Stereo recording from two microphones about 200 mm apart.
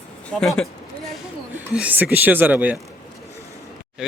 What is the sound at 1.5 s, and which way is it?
Speech, 10° right (ahead or behind).